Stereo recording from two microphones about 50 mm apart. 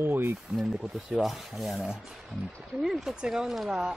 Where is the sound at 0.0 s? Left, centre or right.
Right.